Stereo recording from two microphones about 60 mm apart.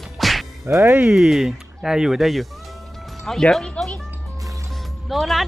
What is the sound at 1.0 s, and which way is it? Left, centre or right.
Speech, centre.